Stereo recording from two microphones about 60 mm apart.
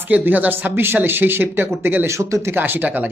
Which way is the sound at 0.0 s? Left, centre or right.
Right.